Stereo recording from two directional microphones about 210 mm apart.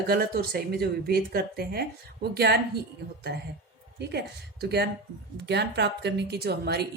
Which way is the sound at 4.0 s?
50° right (ahead or behind).